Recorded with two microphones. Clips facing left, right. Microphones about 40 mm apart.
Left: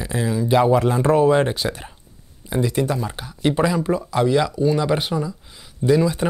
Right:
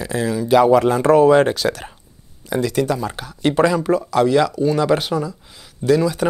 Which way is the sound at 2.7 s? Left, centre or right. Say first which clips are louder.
Right 2 dB; centre.